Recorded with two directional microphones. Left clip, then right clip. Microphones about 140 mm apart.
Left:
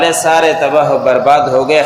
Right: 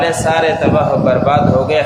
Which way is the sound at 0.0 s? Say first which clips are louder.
Left 3 dB; 35° left (ahead or behind).